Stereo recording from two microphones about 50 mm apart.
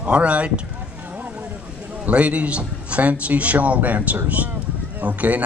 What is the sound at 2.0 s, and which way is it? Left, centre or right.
A man's voice, right.